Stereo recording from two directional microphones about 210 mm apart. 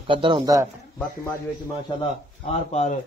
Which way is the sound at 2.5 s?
30° left (ahead or behind).